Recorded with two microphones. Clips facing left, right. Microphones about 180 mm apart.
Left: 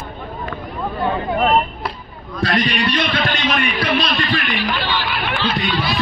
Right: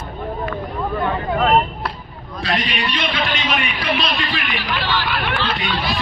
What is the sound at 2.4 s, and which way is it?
Speech, 45° left (ahead or behind).